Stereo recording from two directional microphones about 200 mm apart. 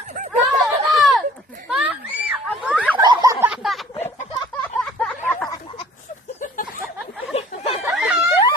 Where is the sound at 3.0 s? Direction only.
20° right (ahead or behind).